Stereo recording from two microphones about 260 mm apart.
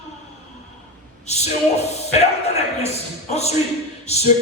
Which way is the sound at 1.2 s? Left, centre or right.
Left.